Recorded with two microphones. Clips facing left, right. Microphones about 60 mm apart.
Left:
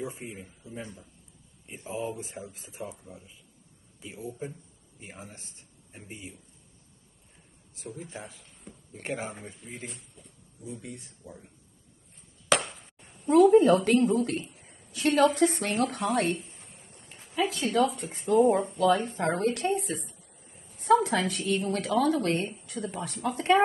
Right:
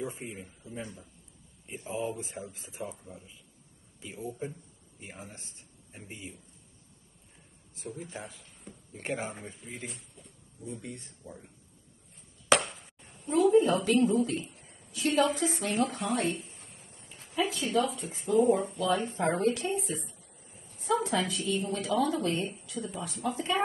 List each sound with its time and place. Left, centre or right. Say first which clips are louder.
0.0 s speech: even; centre
1.9 s speech: even; centre
7.8 s speech: even; centre
12.6 s chop: even; centre
13.3 s a woman's voice: left 5 dB; left
16.3 s a sound: left 1 dB; centre
17.5 s a woman's voice: left 4 dB; left
20.2 s a sound: even; centre
20.8 s a woman's voice: left 6 dB; left